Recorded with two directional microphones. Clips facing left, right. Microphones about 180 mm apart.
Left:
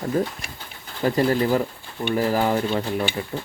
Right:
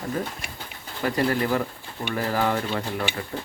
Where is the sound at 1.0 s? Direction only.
25° left (ahead or behind).